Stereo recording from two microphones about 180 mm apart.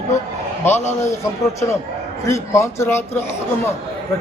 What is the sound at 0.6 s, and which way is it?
Speech, 15° left (ahead or behind).